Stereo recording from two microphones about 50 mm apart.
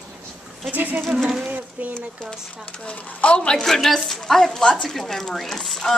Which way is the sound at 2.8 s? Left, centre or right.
Left.